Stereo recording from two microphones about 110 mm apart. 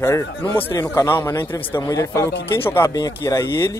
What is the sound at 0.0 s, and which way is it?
A man's voice, 25° left (ahead or behind).